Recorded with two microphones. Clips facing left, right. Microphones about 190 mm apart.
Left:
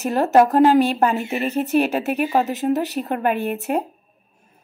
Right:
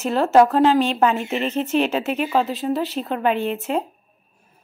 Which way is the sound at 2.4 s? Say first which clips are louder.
Left 2 dB; 45° left (ahead or behind).